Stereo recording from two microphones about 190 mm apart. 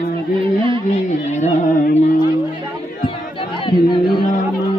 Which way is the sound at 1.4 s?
45° left (ahead or behind).